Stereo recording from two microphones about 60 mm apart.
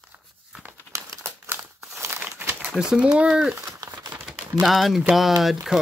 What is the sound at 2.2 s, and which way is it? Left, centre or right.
Crumpling, right.